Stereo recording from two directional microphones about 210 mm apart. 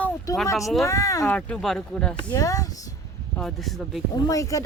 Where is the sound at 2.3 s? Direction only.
15° left (ahead or behind).